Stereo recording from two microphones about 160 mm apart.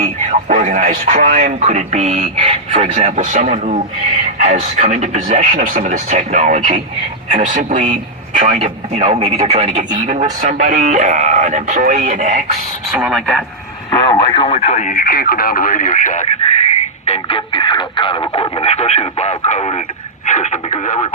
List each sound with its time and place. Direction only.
0.3 s speech: 45° right (ahead or behind)
12.9 s speech: 5° right (ahead or behind)
14.1 s speech: 40° left (ahead or behind)